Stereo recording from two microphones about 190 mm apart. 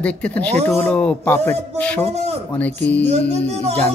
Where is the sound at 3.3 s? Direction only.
35° right (ahead or behind).